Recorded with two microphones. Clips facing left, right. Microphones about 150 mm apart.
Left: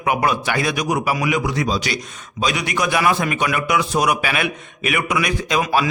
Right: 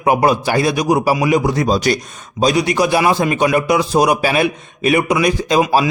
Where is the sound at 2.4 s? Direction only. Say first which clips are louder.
Right 7 dB; 35° right (ahead or behind).